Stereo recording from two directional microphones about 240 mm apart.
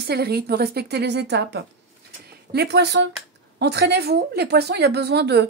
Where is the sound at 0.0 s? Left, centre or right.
Right.